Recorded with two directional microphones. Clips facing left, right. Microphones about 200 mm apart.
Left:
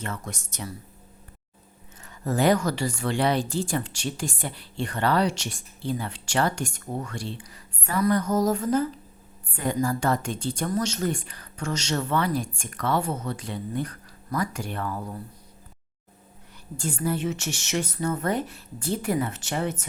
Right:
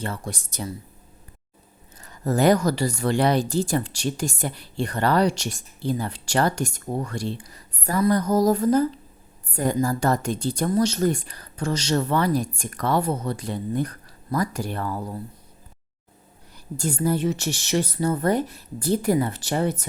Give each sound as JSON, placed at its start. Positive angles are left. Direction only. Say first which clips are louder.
{"t": 0.0, "sound": "speech", "louder": "right 3 dB", "side_deg": -35}
{"t": 2.0, "sound": "speech", "louder": "right 3 dB", "side_deg": -40}
{"t": 16.7, "sound": "speech", "louder": "right 4 dB", "side_deg": -40}